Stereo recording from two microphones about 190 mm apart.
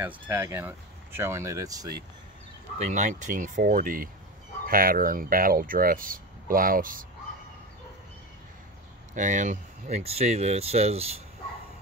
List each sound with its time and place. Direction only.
0.0 s speech: 10° right (ahead or behind)
2.8 s speech: 40° right (ahead or behind)
9.1 s speech: 40° right (ahead or behind)